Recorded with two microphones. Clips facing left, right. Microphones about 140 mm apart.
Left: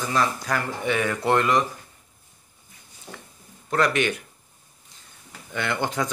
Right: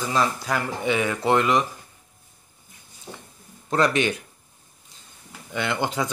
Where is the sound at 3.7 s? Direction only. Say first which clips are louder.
Right 1 dB; 25° right (ahead or behind).